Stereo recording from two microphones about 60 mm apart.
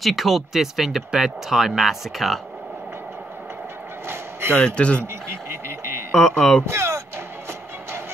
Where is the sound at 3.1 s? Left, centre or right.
Right.